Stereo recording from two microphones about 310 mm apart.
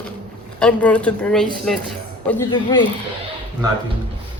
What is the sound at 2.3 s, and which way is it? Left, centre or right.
Speech, centre.